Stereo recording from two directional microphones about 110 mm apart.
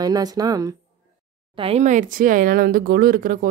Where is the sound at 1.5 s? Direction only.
65° right (ahead or behind); by 2.0 s 80° right.